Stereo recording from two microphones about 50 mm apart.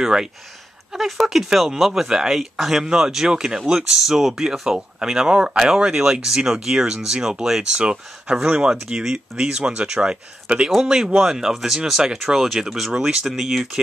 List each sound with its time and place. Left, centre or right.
0.0 s speech: centre
4.0 s speech: centre